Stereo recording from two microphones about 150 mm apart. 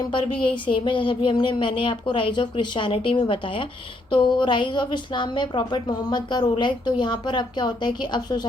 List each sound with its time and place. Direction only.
0.4 s a woman's voice: 35° left (ahead or behind)